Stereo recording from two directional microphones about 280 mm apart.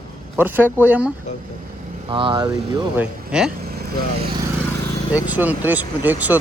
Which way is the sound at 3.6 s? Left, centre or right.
Right.